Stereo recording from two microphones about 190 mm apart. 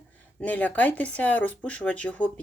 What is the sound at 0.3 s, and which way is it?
Speech, 5° left (ahead or behind).